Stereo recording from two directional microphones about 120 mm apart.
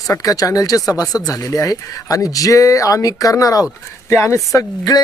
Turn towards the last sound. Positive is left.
turn(degrees=30)  # may be behind; listen again after turning